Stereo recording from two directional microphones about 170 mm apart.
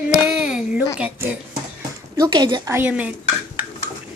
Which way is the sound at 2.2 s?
25° right (ahead or behind).